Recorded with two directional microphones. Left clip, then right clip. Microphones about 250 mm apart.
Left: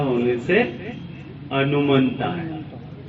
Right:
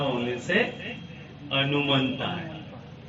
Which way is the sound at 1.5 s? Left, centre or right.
Left.